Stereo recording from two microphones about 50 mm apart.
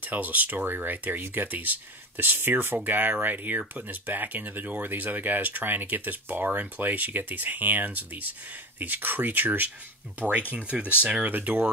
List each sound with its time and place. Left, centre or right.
0.0 s speech: right
10.5 s speech: right
11.2 s speech: right